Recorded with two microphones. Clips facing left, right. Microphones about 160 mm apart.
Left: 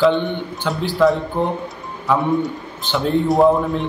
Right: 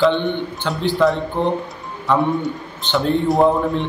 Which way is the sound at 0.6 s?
Centre (ahead or behind).